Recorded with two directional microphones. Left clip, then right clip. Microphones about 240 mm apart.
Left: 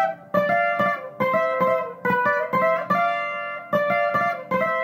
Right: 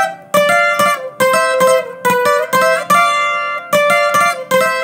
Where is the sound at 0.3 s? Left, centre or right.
Right.